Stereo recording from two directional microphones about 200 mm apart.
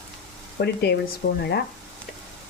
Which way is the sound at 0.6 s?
55° left (ahead or behind).